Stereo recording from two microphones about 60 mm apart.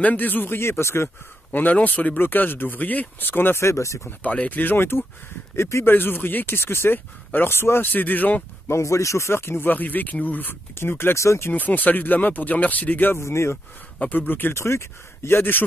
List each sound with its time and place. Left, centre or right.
0.0 s speech: left
1.5 s speech: left
3.6 s speech: left
4.2 s speech: left
5.6 s speech: left
5.9 s speech: left
8.6 s speech: left
11.1 s speech: left
11.5 s speech: left
13.2 s speech: left
13.9 s speech: left
14.5 s speech: left